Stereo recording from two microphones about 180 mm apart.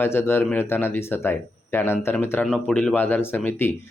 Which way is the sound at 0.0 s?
15° left (ahead or behind).